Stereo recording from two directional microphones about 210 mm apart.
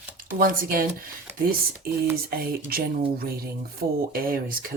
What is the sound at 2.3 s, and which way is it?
Speech, 45° right (ahead or behind).